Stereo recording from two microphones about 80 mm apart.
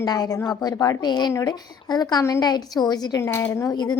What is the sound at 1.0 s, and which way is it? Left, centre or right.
A woman's voice, left.